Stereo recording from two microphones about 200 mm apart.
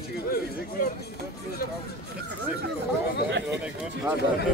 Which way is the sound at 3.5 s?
5° right (ahead or behind).